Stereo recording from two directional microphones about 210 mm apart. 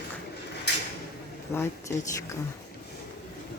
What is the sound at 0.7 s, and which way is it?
Drawer open or close, 55° left (ahead or behind).